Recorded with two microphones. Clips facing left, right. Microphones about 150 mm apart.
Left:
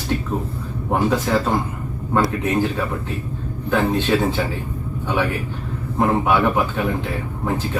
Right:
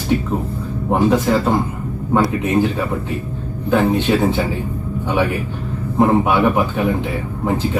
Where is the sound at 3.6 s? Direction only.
15° right (ahead or behind).